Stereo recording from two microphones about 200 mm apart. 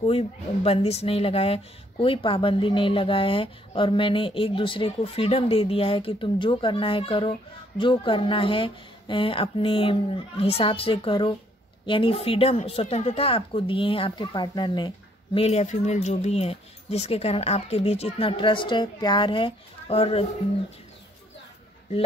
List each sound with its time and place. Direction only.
0.0 s speech: 30° left (ahead or behind)